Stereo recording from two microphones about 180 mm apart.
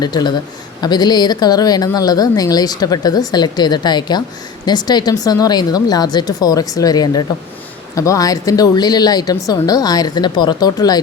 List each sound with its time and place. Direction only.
0.0 s a woman's voice: 25° left (ahead or behind)